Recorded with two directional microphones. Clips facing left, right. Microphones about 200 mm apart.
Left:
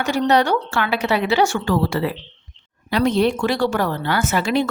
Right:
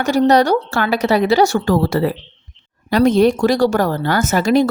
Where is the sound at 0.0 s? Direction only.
40° right (ahead or behind).